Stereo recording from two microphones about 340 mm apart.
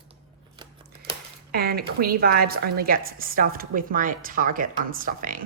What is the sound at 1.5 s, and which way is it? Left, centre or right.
Speech, right.